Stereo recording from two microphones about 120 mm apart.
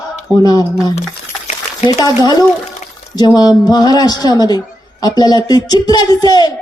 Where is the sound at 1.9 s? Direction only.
35° left (ahead or behind).